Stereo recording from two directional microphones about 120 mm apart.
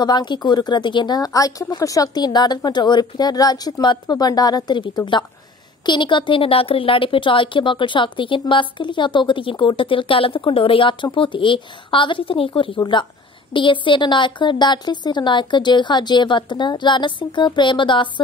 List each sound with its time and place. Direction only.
0.0 s a woman's voice: 40° left (ahead or behind)